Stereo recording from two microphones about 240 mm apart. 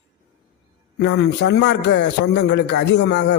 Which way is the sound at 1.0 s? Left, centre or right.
Left.